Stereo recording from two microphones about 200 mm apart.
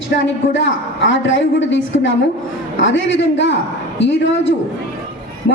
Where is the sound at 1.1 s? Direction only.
65° left (ahead or behind).